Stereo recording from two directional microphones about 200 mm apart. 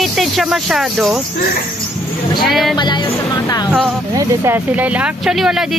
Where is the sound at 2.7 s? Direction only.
20° left (ahead or behind).